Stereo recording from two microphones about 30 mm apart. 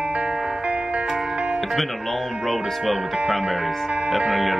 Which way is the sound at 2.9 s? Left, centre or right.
Centre.